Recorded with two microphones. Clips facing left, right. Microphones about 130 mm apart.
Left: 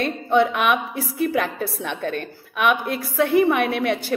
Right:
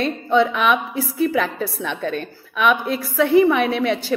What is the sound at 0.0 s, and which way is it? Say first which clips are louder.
Speech: right 1 dB; 50° left (ahead or behind).